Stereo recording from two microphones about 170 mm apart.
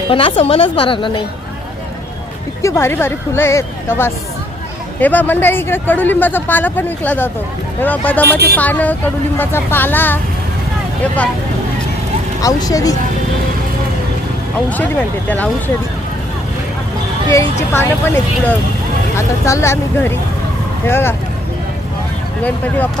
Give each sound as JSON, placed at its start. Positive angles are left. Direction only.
{"t": 0.1, "sound": "a woman's voice", "side_deg": 30}
{"t": 2.6, "sound": "speech", "side_deg": 15}
{"t": 12.4, "sound": "speech", "side_deg": 20}
{"t": 15.3, "sound": "speech", "side_deg": 10}
{"t": 17.3, "sound": "speech", "side_deg": 15}
{"t": 22.4, "sound": "speech", "side_deg": 10}